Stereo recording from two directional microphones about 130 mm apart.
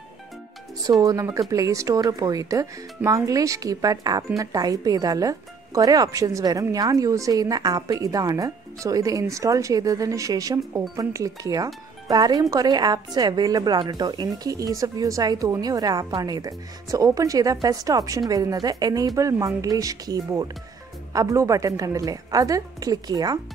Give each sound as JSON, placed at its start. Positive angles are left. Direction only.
{"t": 1.0, "sound": "speech", "side_deg": -25}